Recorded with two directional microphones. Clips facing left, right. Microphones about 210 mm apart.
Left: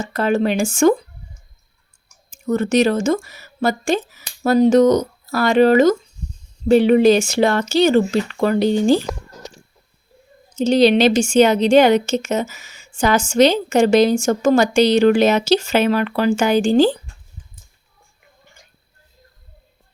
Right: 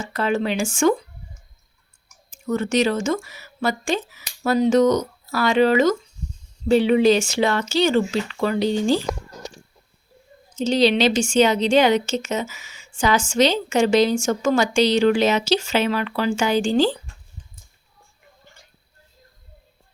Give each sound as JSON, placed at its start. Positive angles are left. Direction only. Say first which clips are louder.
{"t": 0.1, "sound": "speech", "louder": "left 4 dB", "side_deg": 45}
{"t": 2.3, "sound": "speech", "louder": "left 4 dB", "side_deg": 40}
{"t": 10.5, "sound": "speech", "louder": "left 5 dB", "side_deg": 55}
{"t": 12.5, "sound": "speech", "louder": "even", "side_deg": 40}
{"t": 13.0, "sound": "speech", "louder": "left 4 dB", "side_deg": 55}
{"t": 14.7, "sound": "speech", "louder": "left 4 dB", "side_deg": 55}